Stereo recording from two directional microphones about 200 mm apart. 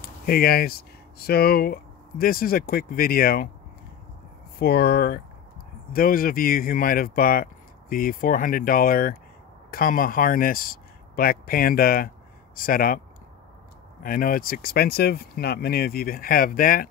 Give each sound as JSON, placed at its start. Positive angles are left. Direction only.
{"t": 0.0, "sound": "speech", "side_deg": 50}
{"t": 4.6, "sound": "speech", "side_deg": 50}
{"t": 14.0, "sound": "speech", "side_deg": 45}